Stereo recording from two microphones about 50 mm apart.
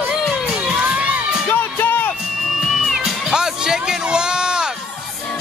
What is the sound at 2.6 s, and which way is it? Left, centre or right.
Music, centre.